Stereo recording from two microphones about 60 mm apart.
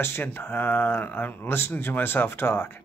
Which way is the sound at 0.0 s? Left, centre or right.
Left.